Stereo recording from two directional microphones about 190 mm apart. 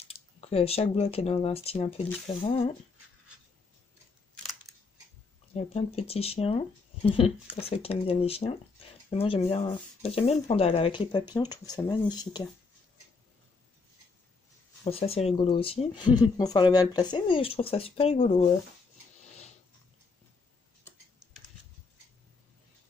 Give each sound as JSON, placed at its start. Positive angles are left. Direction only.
{"t": 0.1, "sound": "speech", "side_deg": 30}
{"t": 5.5, "sound": "speech", "side_deg": 35}
{"t": 14.9, "sound": "speech", "side_deg": 30}